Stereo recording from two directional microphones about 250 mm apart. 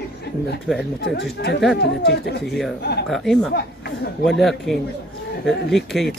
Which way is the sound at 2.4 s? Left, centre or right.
Centre.